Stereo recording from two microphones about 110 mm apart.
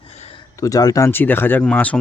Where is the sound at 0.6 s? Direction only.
30° left (ahead or behind).